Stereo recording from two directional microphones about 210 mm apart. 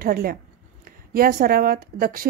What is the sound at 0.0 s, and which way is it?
Speech, 45° right (ahead or behind).